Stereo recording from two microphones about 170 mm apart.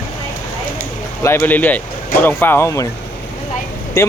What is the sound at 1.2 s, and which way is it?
Speech, 10° left (ahead or behind).